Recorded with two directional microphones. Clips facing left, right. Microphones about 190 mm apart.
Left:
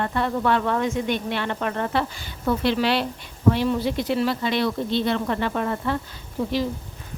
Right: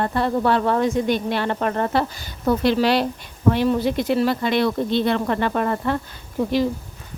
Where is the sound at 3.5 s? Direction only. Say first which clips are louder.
Right 3 dB; 50° right (ahead or behind).